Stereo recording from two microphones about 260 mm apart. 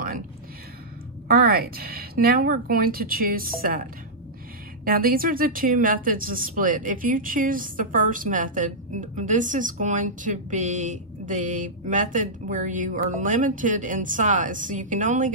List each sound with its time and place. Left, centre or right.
1.3 s speech: right
4.8 s a woman's voice: right